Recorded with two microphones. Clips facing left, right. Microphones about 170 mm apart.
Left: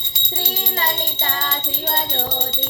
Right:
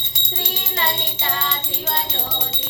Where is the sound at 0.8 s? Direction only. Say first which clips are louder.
Right 1 dB; 40° left (ahead or behind).